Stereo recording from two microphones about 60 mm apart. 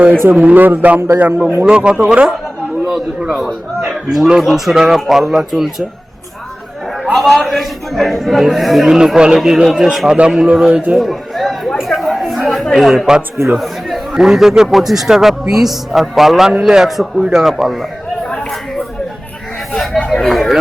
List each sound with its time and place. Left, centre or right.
0.3 s a man's voice: right; by 5.6 s centre
7.0 s a man's voice: centre
9.0 s a man's voice: centre
10.9 s chatter: centre
13.6 s a man's voice: centre
19.7 s a sound: centre